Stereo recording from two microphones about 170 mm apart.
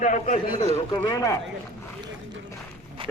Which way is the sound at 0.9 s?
20° left (ahead or behind).